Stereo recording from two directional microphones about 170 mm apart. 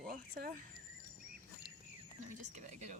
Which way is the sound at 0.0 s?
55° right (ahead or behind).